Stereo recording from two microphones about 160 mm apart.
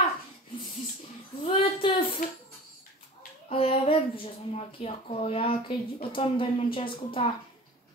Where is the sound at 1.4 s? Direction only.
30° left (ahead or behind).